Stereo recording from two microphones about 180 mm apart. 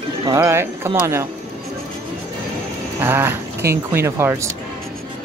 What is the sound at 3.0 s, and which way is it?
Speech, 10° right (ahead or behind).